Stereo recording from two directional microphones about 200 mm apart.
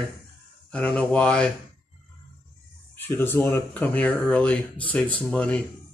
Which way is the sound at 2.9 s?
10° left (ahead or behind).